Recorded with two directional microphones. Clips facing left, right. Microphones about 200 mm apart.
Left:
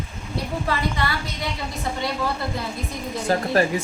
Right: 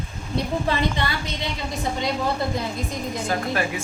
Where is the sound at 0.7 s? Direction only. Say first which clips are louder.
Even; 25° right (ahead or behind).